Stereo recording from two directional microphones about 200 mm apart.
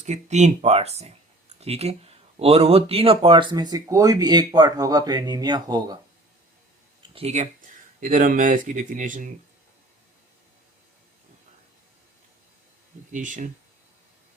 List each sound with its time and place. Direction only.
0.0 s speech: 35° right (ahead or behind); by 6.0 s 20° right (ahead or behind)
7.1 s speech: 30° right (ahead or behind)
13.1 s speech: 40° right (ahead or behind)